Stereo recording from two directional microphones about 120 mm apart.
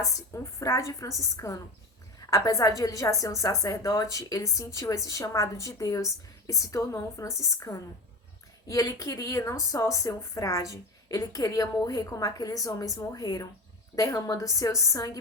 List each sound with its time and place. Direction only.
0.0 s speech: 25° left (ahead or behind)